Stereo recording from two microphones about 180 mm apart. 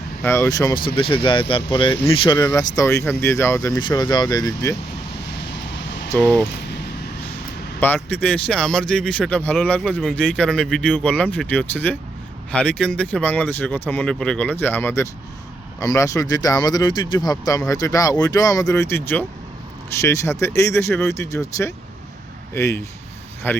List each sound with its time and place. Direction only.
0.2 s speech: 15° left (ahead or behind)
6.1 s speech: 10° left (ahead or behind)
7.8 s speech: 10° left (ahead or behind)